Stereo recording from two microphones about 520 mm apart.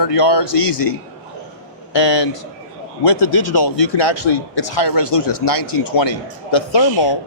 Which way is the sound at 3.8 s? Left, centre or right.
Left.